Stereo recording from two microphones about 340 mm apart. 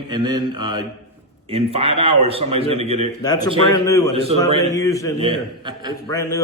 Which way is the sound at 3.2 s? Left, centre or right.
Centre.